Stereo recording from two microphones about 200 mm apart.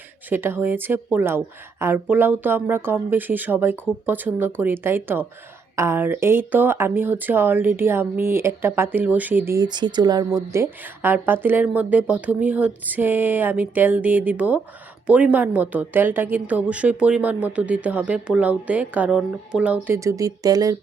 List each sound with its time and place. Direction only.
0.3 s speech: 10° right (ahead or behind)